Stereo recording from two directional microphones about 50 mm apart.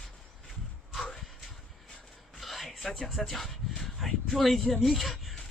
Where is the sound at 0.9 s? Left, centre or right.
Centre.